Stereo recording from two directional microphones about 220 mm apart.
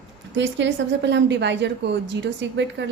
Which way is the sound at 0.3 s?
55° right (ahead or behind).